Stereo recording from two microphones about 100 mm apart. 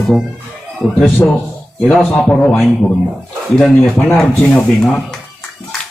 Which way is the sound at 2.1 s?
10° left (ahead or behind).